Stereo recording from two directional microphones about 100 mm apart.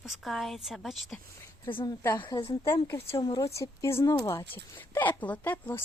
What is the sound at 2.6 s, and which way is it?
Speech, 25° left (ahead or behind).